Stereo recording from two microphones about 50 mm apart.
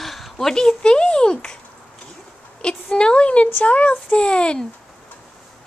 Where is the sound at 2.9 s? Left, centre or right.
Left.